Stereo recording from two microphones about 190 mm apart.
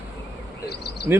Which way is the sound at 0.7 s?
55° left (ahead or behind).